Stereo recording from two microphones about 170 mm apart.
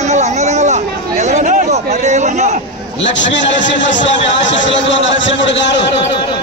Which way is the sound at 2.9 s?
90° left.